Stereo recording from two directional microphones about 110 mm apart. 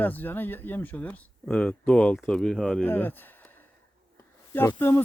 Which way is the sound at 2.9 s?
20° left (ahead or behind).